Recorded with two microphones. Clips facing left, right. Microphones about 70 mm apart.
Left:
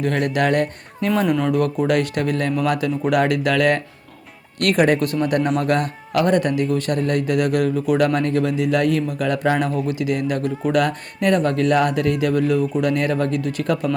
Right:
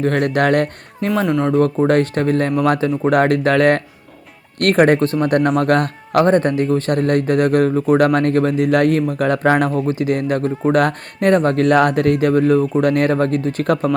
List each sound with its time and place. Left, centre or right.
0.3 s speech: right
1.5 s speech: right
5.2 s speech: right
6.2 s speech: right